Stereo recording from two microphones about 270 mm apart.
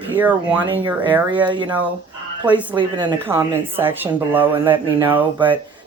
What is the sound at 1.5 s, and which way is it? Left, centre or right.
A woman's voice, centre.